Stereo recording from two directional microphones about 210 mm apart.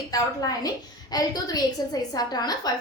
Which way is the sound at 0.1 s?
15° left (ahead or behind).